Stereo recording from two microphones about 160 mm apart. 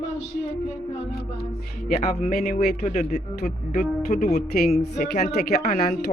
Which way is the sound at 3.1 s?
75° left (ahead or behind).